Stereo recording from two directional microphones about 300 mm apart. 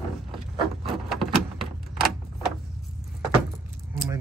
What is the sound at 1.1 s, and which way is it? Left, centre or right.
Door, centre.